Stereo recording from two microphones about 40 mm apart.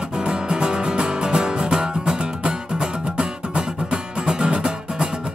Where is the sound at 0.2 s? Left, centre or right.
Right.